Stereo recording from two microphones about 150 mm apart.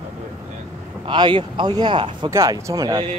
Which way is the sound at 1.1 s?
30° right (ahead or behind).